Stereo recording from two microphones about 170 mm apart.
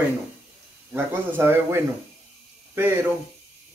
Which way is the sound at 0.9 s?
10° right (ahead or behind).